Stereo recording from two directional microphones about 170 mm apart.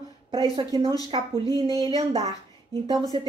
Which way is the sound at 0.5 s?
20° right (ahead or behind).